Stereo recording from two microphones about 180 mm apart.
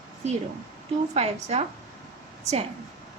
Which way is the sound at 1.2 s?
35° right (ahead or behind).